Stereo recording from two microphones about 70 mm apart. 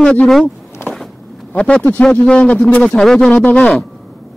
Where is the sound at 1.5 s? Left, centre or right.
Centre.